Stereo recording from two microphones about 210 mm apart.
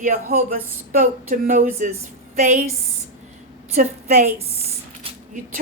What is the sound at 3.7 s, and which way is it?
Speech, 35° right (ahead or behind).